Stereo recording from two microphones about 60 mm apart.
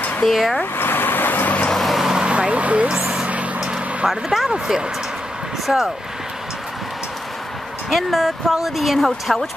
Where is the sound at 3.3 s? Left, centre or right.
Right.